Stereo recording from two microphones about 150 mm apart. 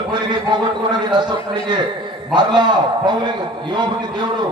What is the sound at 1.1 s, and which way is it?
A man's voice, 30° right (ahead or behind).